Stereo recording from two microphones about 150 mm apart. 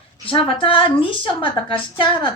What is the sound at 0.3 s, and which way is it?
A woman's voice, 35° left (ahead or behind).